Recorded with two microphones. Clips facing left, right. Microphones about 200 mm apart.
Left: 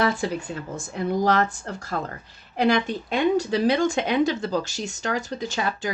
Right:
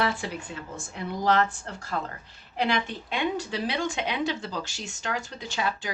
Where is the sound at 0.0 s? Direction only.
40° left (ahead or behind).